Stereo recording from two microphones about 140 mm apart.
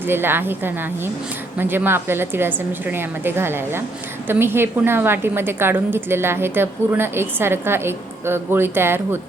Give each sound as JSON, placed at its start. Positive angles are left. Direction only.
{"t": 0.0, "sound": "a woman's voice", "side_deg": -15}